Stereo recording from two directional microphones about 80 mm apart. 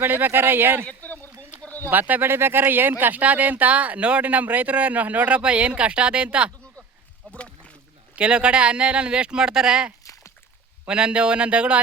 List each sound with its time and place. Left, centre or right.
0.0 s speech: right
0.9 s a sound: left
1.9 s speech: right
7.3 s rowboat: centre
8.1 s speech: centre